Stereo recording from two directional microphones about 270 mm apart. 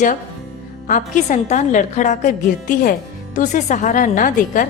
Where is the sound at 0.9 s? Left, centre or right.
Left.